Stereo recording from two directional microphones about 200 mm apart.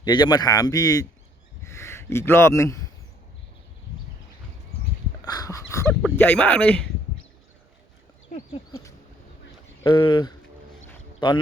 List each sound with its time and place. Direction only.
0.0 s speech: 20° left (ahead or behind)
5.2 s speech: 20° left (ahead or behind)
9.8 s speech: 25° left (ahead or behind)